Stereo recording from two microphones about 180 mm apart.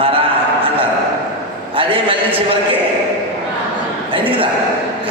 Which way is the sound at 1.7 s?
30° right (ahead or behind).